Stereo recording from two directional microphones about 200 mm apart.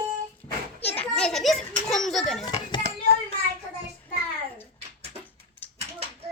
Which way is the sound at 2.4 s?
20° left (ahead or behind).